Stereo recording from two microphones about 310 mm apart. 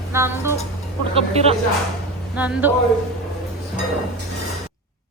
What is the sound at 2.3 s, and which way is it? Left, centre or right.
Speech, centre.